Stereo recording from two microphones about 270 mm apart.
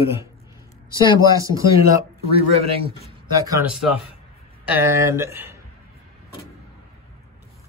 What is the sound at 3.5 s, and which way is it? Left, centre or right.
Speech, centre.